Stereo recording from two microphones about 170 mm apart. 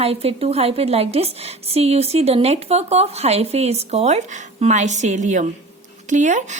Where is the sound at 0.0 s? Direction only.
35° right (ahead or behind).